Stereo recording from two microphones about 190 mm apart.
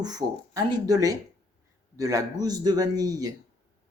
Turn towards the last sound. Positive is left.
turn(degrees=-20)  # may be behind; listen again after turning